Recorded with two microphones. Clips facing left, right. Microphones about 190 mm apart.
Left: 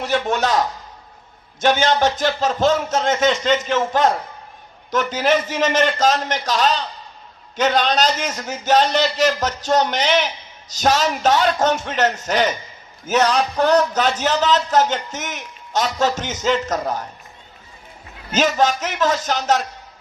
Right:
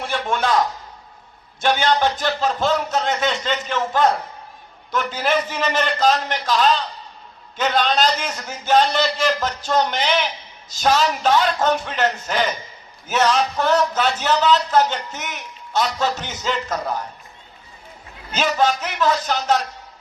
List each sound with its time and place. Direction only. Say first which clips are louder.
0.0 s a man's voice: left 3 dB; 45° left (ahead or behind)
18.3 s a man's voice: left 2 dB; 40° left (ahead or behind)